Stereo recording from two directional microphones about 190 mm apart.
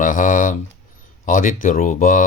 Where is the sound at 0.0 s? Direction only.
45° left (ahead or behind).